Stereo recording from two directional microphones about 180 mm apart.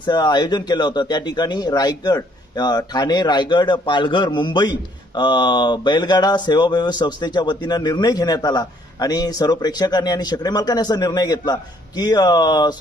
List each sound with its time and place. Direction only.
0.0 s speech: 25° left (ahead or behind)